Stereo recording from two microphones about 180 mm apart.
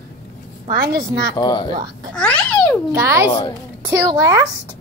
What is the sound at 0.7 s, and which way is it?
Speech, 55° right (ahead or behind).